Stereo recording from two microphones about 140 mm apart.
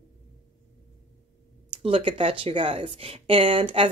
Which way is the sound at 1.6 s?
40° right (ahead or behind).